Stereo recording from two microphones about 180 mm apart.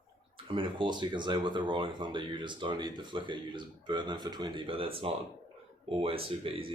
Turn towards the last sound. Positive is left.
turn(degrees=-30)  # may be behind; listen again after turning